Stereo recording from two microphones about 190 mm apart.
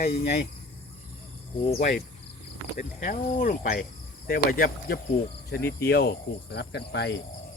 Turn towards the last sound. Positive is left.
turn(degrees=60)  # may be behind; listen again after turning